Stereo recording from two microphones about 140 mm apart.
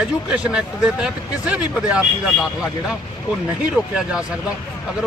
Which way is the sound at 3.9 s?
5° right (ahead or behind).